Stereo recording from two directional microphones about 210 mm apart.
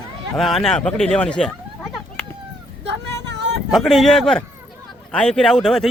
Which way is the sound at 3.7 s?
Centre (ahead or behind).